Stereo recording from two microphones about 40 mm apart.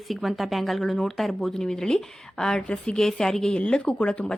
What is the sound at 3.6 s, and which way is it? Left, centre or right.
Speech, left.